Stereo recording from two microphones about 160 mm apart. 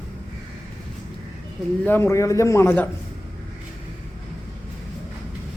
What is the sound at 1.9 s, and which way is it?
A man's voice, 15° left (ahead or behind).